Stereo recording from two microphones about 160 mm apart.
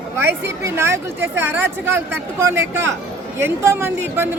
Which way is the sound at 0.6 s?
15° right (ahead or behind).